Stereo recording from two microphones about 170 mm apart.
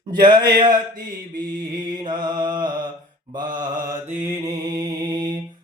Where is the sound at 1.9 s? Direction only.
25° right (ahead or behind).